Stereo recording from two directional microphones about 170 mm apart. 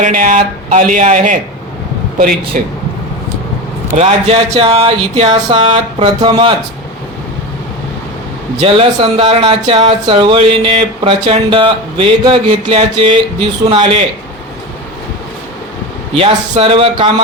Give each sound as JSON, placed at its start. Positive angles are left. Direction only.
{"t": 0.0, "sound": "speech", "side_deg": -50}
{"t": 2.5, "sound": "speech", "side_deg": -55}
{"t": 3.9, "sound": "speech", "side_deg": -40}
{"t": 8.6, "sound": "speech", "side_deg": -35}
{"t": 16.1, "sound": "speech", "side_deg": -35}